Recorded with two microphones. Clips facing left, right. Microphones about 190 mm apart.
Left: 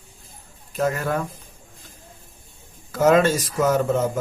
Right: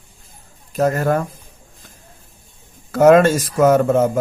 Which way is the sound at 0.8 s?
45° right (ahead or behind).